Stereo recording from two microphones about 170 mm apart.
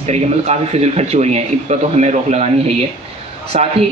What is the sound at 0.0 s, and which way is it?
Speech, 40° right (ahead or behind).